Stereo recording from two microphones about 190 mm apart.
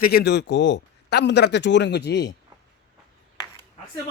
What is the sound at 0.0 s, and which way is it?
Speech, 55° left (ahead or behind).